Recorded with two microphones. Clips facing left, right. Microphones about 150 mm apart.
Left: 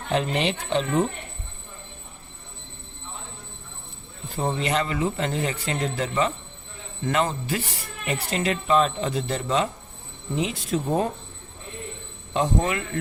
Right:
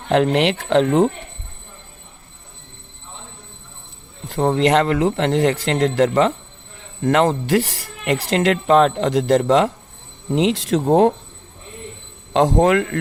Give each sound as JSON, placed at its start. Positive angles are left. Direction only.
{"t": 0.1, "sound": "speech", "side_deg": -80}
{"t": 4.3, "sound": "speech", "side_deg": -70}
{"t": 12.3, "sound": "speech", "side_deg": -90}